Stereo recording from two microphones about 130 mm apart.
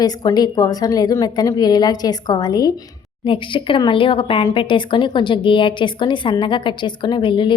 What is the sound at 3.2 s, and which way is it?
Speech, 40° left (ahead or behind).